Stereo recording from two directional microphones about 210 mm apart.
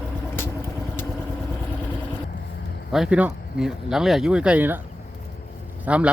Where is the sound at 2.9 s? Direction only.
5° right (ahead or behind).